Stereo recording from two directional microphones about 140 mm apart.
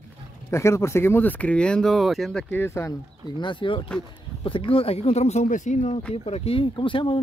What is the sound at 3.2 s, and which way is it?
Speech, 35° left (ahead or behind).